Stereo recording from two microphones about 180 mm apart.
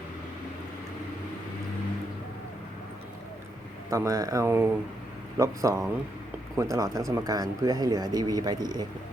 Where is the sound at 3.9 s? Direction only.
20° right (ahead or behind).